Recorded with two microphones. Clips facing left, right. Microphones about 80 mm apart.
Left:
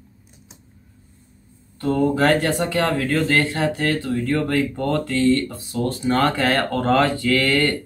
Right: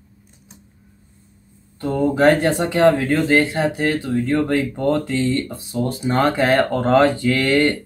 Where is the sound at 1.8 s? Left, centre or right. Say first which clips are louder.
Right 2 dB; centre.